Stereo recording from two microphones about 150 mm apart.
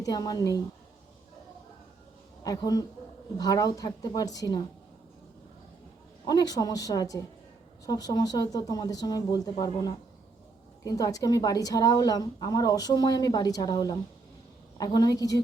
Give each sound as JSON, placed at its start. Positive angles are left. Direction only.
{"t": 0.0, "sound": "a woman's voice", "side_deg": 25}
{"t": 2.4, "sound": "a woman's voice", "side_deg": 25}
{"t": 6.2, "sound": "a woman's voice", "side_deg": 25}